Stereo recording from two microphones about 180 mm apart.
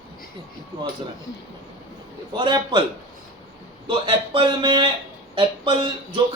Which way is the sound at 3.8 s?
25° right (ahead or behind).